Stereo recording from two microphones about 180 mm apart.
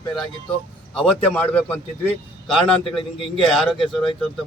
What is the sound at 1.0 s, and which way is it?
Speech, 5° left (ahead or behind).